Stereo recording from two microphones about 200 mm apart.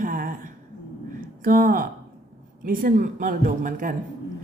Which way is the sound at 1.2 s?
45° right (ahead or behind).